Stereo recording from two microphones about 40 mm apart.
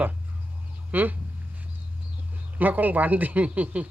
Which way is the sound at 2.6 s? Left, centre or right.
Right.